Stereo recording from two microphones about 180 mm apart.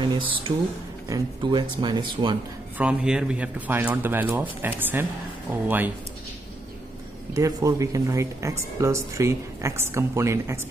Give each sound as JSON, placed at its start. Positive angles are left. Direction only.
{"t": 0.0, "sound": "speech", "side_deg": -25}
{"t": 2.8, "sound": "speech", "side_deg": -5}
{"t": 7.3, "sound": "speech", "side_deg": -20}